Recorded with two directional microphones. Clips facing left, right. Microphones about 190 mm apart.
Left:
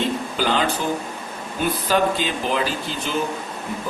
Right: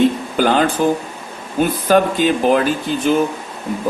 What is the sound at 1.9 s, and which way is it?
A man's voice, 50° right (ahead or behind).